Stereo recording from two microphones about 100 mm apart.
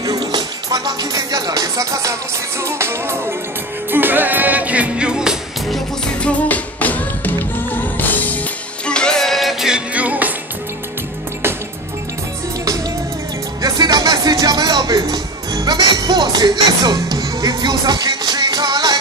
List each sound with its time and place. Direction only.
0.0 s music: 40° right (ahead or behind); by 5.8 s 5° right (ahead or behind)
6.2 s music: 15° left (ahead or behind); by 10.3 s 15° right (ahead or behind)
13.6 s music: 40° right (ahead or behind)